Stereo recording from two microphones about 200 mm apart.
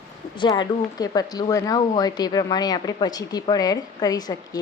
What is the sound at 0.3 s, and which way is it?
Speech, 20° left (ahead or behind).